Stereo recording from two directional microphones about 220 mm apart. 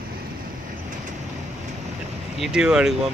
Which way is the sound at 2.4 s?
5° right (ahead or behind).